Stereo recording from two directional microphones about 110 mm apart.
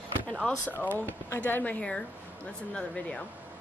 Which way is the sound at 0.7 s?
15° left (ahead or behind).